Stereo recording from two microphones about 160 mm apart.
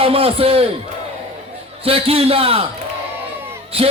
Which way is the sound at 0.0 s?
35° right (ahead or behind).